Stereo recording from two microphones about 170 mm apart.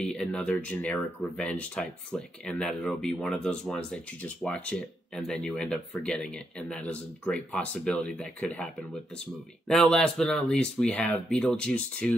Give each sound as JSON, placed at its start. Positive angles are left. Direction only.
{"t": 0.0, "sound": "speech", "side_deg": 5}